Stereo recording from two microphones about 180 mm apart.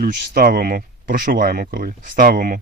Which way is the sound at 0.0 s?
50° right (ahead or behind).